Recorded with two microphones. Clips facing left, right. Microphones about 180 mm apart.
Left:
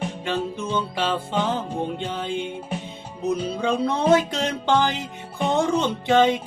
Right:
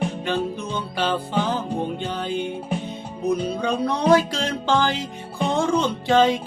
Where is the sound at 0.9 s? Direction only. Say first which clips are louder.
Right 5 dB; 25° left (ahead or behind).